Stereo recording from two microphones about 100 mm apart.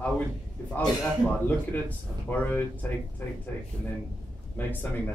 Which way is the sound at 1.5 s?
15° left (ahead or behind).